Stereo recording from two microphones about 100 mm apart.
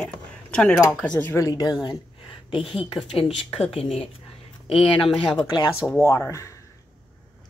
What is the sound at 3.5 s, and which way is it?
Speech, 75° left (ahead or behind).